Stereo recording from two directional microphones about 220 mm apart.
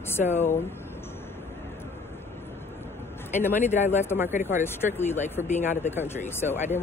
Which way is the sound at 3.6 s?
30° left (ahead or behind).